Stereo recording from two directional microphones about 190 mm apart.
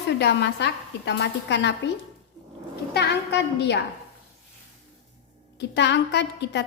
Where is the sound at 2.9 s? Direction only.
60° left (ahead or behind).